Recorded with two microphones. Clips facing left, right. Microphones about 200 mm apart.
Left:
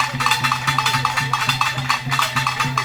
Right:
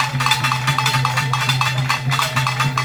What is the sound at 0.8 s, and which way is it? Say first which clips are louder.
Music: right 1 dB; centre (ahead or behind).